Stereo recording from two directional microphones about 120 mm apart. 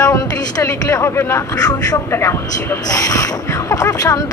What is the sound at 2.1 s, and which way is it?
Speech, 20° left (ahead or behind).